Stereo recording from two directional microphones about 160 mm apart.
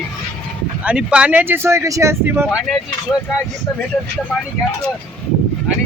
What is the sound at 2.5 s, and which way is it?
Speech, centre (ahead or behind).